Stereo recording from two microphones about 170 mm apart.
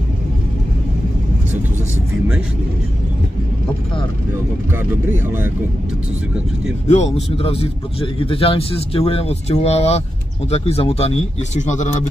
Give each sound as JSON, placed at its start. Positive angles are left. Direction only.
{"t": 4.7, "sound": "speech", "side_deg": -15}
{"t": 6.9, "sound": "a man's voice", "side_deg": 40}